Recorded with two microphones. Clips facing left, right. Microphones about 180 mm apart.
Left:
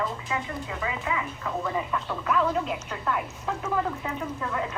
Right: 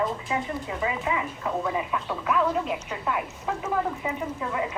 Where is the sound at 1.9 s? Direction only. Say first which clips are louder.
Right 1 dB; 5° right (ahead or behind).